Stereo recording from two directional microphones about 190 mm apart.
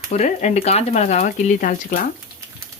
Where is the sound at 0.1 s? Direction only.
40° left (ahead or behind).